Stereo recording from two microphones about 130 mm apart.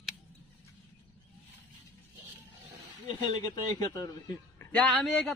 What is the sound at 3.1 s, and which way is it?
Speech, 35° left (ahead or behind).